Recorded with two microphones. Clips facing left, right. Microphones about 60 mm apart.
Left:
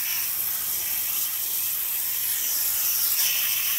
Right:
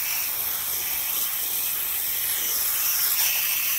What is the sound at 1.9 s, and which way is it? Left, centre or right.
Spray, right.